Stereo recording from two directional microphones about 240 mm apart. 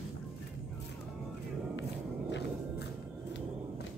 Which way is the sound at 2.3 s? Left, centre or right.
Left.